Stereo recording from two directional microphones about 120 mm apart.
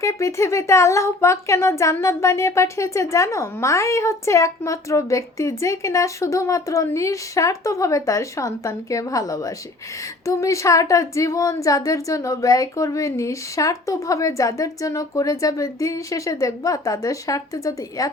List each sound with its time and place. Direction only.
0.0 s speech: 25° left (ahead or behind)